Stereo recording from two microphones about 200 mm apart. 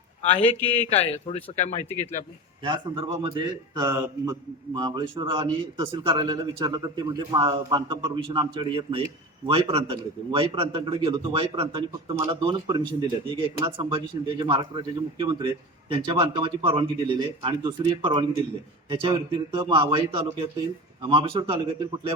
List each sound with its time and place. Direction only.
0.2 s a man's voice: 30° left (ahead or behind)
2.6 s speech: 25° right (ahead or behind)
21.0 s speech: 25° right (ahead or behind)